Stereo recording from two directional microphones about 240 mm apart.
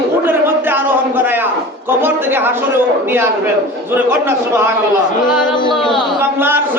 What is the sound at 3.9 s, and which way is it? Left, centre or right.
Speech, centre.